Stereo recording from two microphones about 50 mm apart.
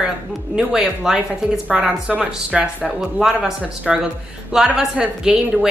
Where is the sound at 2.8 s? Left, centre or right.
Centre.